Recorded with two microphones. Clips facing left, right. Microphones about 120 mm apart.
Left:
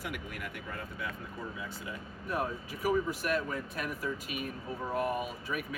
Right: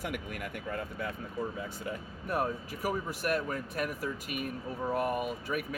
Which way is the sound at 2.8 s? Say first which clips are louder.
Left 2 dB; 50° right (ahead or behind).